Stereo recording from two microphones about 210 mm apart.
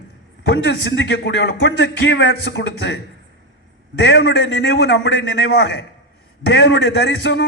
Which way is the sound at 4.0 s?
50° left (ahead or behind).